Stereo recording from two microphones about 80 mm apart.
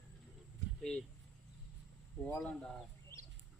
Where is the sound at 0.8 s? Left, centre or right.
Centre.